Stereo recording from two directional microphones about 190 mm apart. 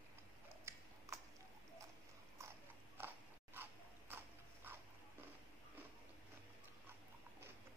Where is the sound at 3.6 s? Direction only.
10° right (ahead or behind).